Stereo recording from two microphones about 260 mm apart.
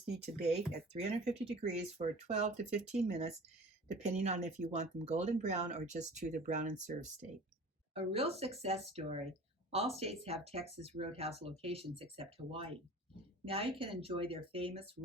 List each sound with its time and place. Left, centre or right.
0.4 s speech: right